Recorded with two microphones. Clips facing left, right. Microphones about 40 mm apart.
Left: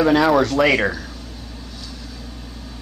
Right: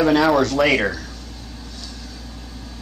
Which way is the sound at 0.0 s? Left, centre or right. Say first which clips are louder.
Left 1 dB; centre.